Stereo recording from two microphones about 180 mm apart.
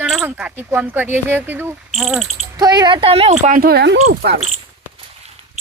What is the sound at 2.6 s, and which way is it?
Speech, 20° right (ahead or behind).